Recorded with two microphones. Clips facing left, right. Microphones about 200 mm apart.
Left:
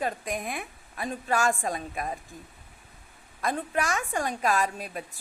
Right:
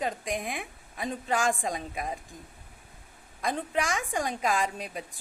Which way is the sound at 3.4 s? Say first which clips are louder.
Left 1 dB; 15° right (ahead or behind).